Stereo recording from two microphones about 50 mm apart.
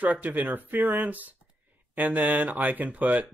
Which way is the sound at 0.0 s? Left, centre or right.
Right.